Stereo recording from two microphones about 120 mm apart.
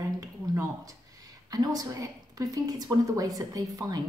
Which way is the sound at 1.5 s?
30° right (ahead or behind).